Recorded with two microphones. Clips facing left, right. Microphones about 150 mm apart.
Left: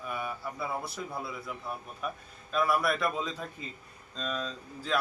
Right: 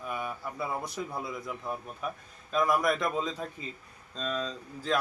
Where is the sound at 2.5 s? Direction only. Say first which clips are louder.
Right 1 dB; 15° right (ahead or behind).